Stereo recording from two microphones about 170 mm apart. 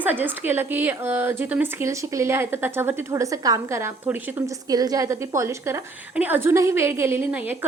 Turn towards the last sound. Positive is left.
turn(degrees=-10)  # may be behind; listen again after turning